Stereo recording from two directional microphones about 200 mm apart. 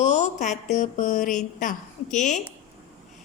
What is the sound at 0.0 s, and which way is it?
Speech, 35° left (ahead or behind).